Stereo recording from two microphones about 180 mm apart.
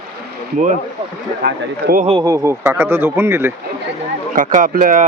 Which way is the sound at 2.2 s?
20° right (ahead or behind).